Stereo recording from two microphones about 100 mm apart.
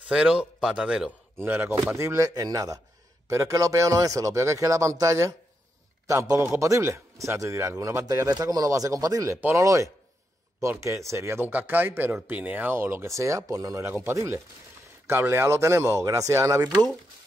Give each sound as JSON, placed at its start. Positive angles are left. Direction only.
{"t": 0.1, "sound": "speech", "side_deg": -10}
{"t": 1.4, "sound": "a man's voice", "side_deg": -20}